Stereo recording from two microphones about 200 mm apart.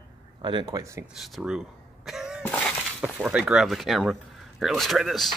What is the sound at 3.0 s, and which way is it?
Speech, 5° right (ahead or behind).